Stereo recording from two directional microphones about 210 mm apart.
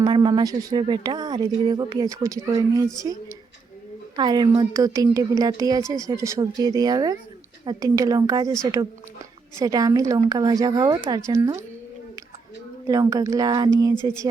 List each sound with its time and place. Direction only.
0.0 s a woman's voice: 20° right (ahead or behind)
12.9 s a woman's voice: 15° right (ahead or behind)